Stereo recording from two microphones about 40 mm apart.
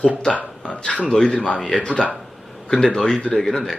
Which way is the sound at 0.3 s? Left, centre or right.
Left.